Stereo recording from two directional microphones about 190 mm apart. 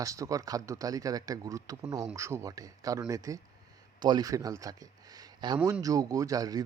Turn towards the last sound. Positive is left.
turn(degrees=-20)  # may be behind; listen again after turning